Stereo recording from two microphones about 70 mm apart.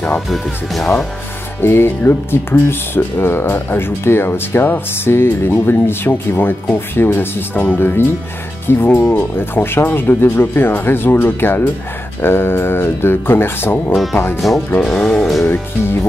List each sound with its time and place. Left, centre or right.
0.3 s speech: centre
1.6 s speech: left
14.8 s speech: centre
15.4 s speech: left